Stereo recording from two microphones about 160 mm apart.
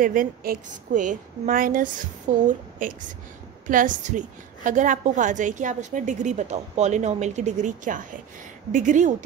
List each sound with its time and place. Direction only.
0.0 s a woman's voice: 60° right (ahead or behind)